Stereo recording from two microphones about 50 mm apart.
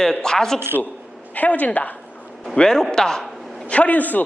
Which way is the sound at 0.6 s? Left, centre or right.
Right.